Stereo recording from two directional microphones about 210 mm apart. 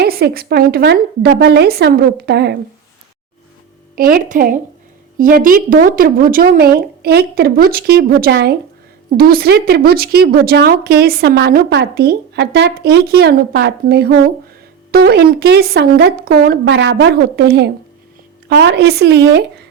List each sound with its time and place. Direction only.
0.0 s a woman's voice: 45° right (ahead or behind)
3.9 s a woman's voice: 45° right (ahead or behind)